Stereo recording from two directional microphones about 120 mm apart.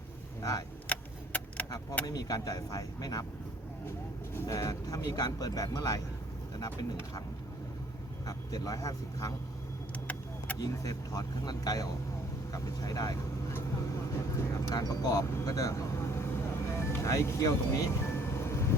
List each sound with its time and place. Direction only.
0.9 s keys jangling: 10° left (ahead or behind)
2.0 s speech: 35° left (ahead or behind)
4.4 s speech: 25° left (ahead or behind)
8.3 s speech: 30° left (ahead or behind)
10.1 s vehicle: 15° left (ahead or behind)
10.6 s speech: 30° left (ahead or behind)
13.5 s vehicle: 20° left (ahead or behind)